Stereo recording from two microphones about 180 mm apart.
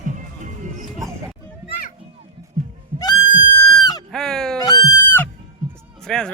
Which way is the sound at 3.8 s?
20° left (ahead or behind).